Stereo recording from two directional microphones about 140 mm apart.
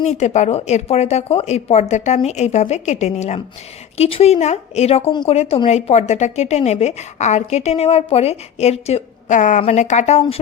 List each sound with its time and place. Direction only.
0.0 s a woman's voice: 55° left (ahead or behind)